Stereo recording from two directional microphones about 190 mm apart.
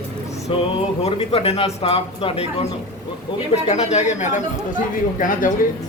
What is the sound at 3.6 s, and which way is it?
Speech, 35° left (ahead or behind).